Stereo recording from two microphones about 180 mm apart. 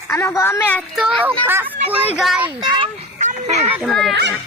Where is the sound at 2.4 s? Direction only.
25° right (ahead or behind).